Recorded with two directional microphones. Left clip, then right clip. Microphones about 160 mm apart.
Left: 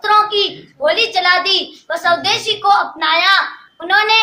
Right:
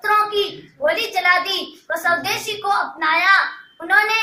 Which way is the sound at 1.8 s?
5° right (ahead or behind).